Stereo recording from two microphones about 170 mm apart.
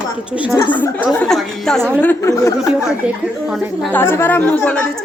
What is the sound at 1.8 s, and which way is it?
Speech, 10° right (ahead or behind).